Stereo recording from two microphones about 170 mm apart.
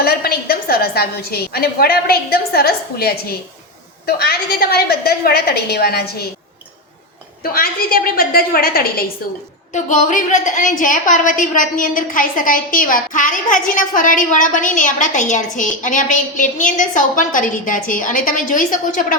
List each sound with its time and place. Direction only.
0.0 s a woman's voice: 65° left (ahead or behind)
7.4 s a woman's voice: 60° left (ahead or behind)
9.7 s a woman's voice: 50° left (ahead or behind)